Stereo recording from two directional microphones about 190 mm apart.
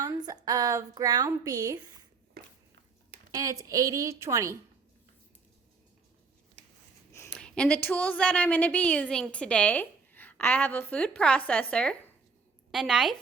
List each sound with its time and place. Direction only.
0.0 s a woman's voice: 20° right (ahead or behind)
2.4 s a sound: 55° right (ahead or behind)
3.3 s a woman's voice: 15° right (ahead or behind)
7.1 s a woman's voice: 10° left (ahead or behind)